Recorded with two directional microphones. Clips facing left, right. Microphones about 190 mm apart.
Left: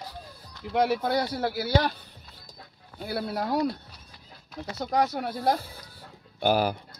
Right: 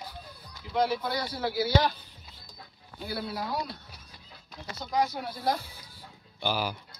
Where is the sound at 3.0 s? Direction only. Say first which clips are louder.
Left 4 dB; 55° left (ahead or behind).